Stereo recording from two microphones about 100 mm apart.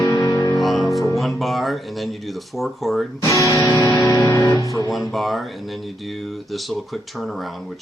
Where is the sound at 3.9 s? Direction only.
35° left (ahead or behind).